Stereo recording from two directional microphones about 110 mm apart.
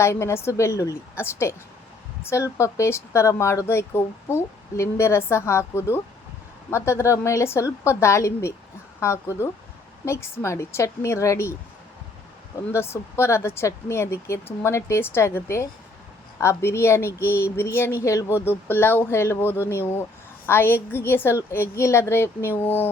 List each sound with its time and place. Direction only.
0.0 s speech: 25° left (ahead or behind)
12.7 s speech: 25° left (ahead or behind)